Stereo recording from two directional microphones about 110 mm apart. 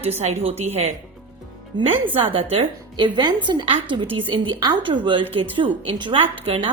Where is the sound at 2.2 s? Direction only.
55° right (ahead or behind).